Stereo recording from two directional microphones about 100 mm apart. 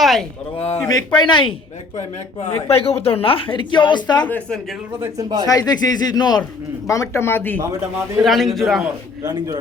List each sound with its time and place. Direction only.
0.0 s a sound: centre (ahead or behind)
0.5 s speech: 80° left
0.9 s a woman's voice: 40° left (ahead or behind)
2.6 s speech: 90° left
3.2 s a woman's voice: 65° left (ahead or behind); by 4.3 s 45° left (ahead or behind)
4.3 s speech: 10° left (ahead or behind)
4.9 s a man's voice: 30° right (ahead or behind)
5.5 s a woman's voice: 40° left (ahead or behind)
6.8 s speech: 35° left (ahead or behind)
8.2 s a man's voice: centre (ahead or behind)
9.2 s a man's voice: 40° right (ahead or behind)